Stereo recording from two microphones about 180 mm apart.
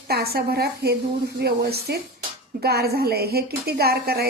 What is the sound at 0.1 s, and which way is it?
Speech, 60° right (ahead or behind).